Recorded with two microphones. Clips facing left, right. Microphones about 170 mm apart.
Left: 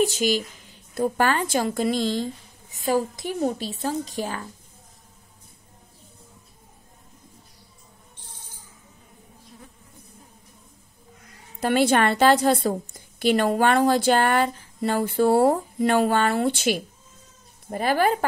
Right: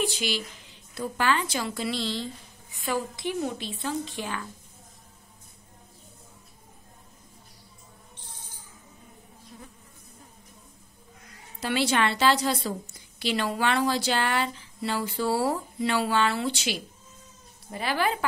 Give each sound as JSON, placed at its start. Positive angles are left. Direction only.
{"t": 0.0, "sound": "a woman's voice", "side_deg": 45}
{"t": 11.6, "sound": "a woman's voice", "side_deg": 50}